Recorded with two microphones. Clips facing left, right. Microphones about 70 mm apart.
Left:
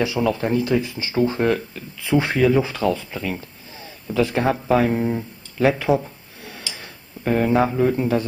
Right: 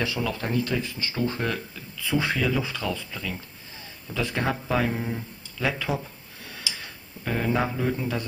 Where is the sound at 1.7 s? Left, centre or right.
Left.